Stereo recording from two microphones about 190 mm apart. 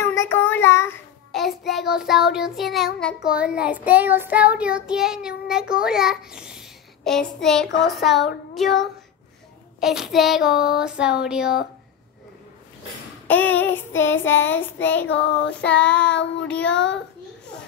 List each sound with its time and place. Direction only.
0.0 s child singing: 15° left (ahead or behind)
1.3 s child singing: centre (ahead or behind)
9.8 s child singing: centre (ahead or behind)
13.3 s child singing: 10° left (ahead or behind)
15.0 s child singing: 65° left (ahead or behind)
15.7 s child singing: 5° left (ahead or behind)
16.0 s child singing: 65° left (ahead or behind)